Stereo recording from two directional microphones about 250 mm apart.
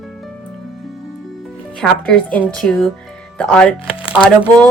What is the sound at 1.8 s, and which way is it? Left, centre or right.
Speech, centre.